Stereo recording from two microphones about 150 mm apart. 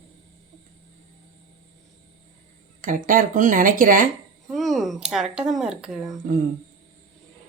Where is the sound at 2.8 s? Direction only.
65° right (ahead or behind).